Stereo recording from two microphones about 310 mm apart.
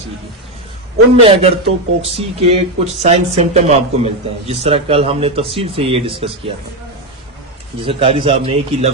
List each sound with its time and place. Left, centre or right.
1.2 s speech: centre
7.8 s speech: centre